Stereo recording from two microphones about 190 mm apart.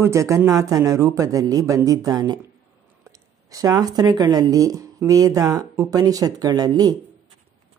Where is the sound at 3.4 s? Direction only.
20° right (ahead or behind).